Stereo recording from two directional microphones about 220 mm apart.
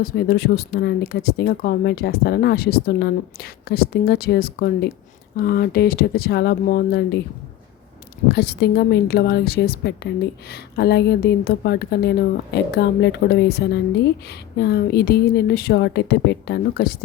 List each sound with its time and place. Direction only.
0.0 s speech: 45° left (ahead or behind)
8.3 s speech: 50° left (ahead or behind)